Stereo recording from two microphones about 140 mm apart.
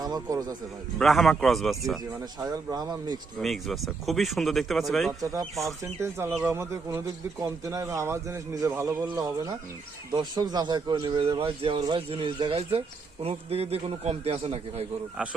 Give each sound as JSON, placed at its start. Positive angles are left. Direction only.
{"t": 0.0, "sound": "a man's voice", "side_deg": -25}
{"t": 0.9, "sound": "speech", "side_deg": 0}
{"t": 2.4, "sound": "a man's voice", "side_deg": -25}
{"t": 3.4, "sound": "speech", "side_deg": 0}
{"t": 5.2, "sound": "a man's voice", "side_deg": -25}
{"t": 11.2, "sound": "a man's voice", "side_deg": -40}